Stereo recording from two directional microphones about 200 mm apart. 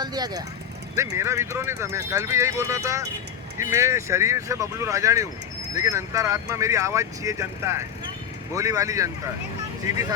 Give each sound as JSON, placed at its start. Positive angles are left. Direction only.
{"t": 0.0, "sound": "speech", "side_deg": -20}